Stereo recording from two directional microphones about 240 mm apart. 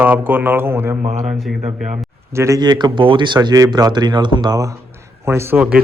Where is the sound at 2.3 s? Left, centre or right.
Centre.